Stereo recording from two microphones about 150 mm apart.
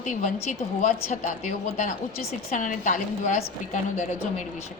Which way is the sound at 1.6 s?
70° left (ahead or behind).